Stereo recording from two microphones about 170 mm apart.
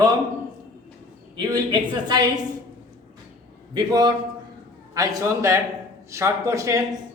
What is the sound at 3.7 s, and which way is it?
A man's voice, 25° right (ahead or behind).